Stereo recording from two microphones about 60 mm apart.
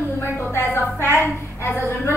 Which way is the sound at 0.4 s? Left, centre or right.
Left.